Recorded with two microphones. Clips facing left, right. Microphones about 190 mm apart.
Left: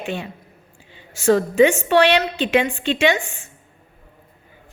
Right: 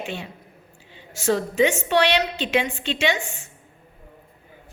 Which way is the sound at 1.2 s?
55° left (ahead or behind).